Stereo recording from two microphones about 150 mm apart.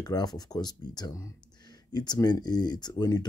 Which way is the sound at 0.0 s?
25° left (ahead or behind).